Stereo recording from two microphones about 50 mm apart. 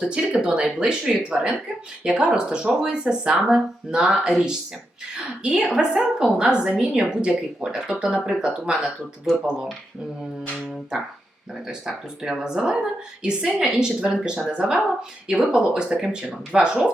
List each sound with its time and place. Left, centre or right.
0.0 s speech: centre
9.3 s speech: centre
11.6 s speech: centre